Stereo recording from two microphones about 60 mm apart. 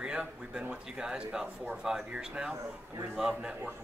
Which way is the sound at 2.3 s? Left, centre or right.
Centre.